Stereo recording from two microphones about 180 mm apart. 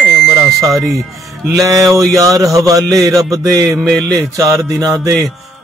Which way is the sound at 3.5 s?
20° right (ahead or behind).